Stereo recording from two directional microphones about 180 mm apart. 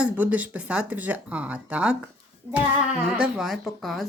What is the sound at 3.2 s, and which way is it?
Speech, 5° right (ahead or behind).